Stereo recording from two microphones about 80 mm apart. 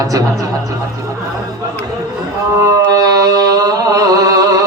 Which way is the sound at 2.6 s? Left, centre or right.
Right.